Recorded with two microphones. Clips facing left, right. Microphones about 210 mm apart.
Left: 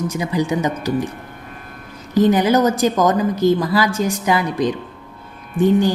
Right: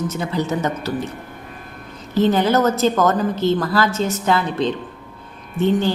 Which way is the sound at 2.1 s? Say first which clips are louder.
Left 2 dB; 15° left (ahead or behind).